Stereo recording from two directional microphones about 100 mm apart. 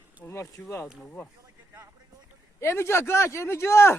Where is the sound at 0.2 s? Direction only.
25° left (ahead or behind).